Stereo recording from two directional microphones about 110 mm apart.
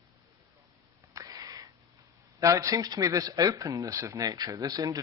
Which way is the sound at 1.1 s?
35° right (ahead or behind).